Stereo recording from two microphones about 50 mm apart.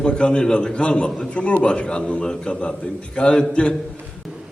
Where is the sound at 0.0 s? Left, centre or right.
Left.